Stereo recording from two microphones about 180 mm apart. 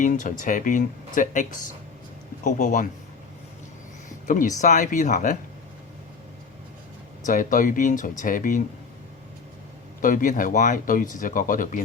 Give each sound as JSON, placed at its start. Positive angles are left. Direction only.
{"t": 0.0, "sound": "speech", "side_deg": 45}
{"t": 4.3, "sound": "speech", "side_deg": 45}
{"t": 7.3, "sound": "speech", "side_deg": 45}
{"t": 10.0, "sound": "speech", "side_deg": 50}